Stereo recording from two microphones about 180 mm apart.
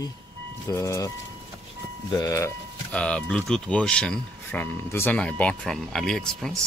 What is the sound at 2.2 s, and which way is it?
Speech, 15° left (ahead or behind).